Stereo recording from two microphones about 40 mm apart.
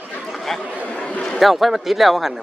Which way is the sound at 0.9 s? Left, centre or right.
Left.